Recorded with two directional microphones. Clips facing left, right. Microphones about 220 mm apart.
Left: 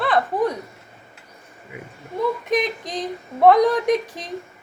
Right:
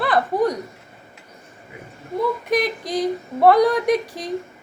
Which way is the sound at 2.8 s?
35° right (ahead or behind).